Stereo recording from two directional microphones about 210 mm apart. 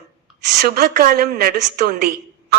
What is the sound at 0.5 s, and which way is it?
A woman's voice, 50° right (ahead or behind).